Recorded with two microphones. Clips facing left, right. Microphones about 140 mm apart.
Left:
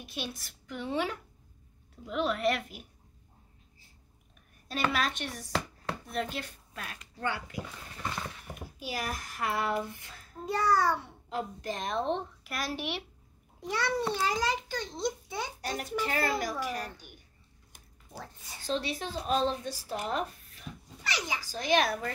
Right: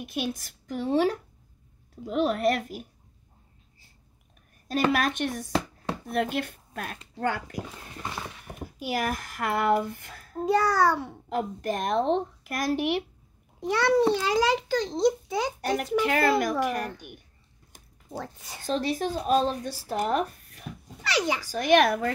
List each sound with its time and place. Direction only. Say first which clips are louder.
0.0 s a woman's voice: right 8 dB; 50° right (ahead or behind)
4.9 s a woman's voice: right 6 dB; 50° right (ahead or behind)
8.7 s a child's voice: right 8 dB; 60° right (ahead or behind); by 11.3 s 90° right
11.3 s speech: right 6 dB; 55° right (ahead or behind)
13.6 s a child's voice: right 9 dB; 70° right (ahead or behind)
14.1 s a child's voice: right 6 dB; 90° right; by 17.2 s 60° right (ahead or behind)
18.2 s a child's voice: right 7 dB; 80° right
18.7 s a child's voice: right 6 dB; 45° right (ahead or behind); by 22.1 s 60° right (ahead or behind)